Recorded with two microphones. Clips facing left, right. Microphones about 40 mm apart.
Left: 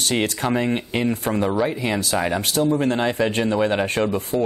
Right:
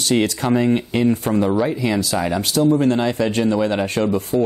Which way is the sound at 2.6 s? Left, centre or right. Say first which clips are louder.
Right 5 dB; centre.